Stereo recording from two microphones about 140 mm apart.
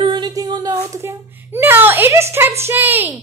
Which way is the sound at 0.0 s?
35° right (ahead or behind).